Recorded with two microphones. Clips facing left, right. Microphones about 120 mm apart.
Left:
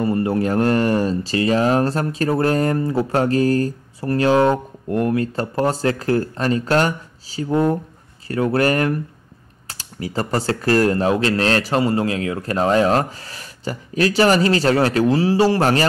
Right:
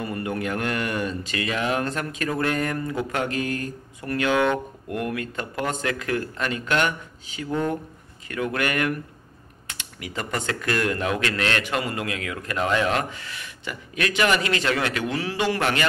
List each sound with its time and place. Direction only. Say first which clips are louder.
0.0 s speech: left 9 dB; 30° left (ahead or behind)